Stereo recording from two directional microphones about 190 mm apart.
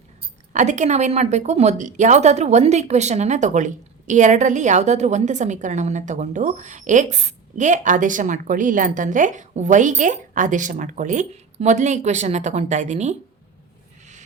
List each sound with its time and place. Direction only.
0.2 s a woman's voice: 40° right (ahead or behind)